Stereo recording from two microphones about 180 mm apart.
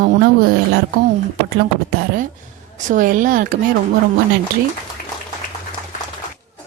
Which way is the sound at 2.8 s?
45° right (ahead or behind).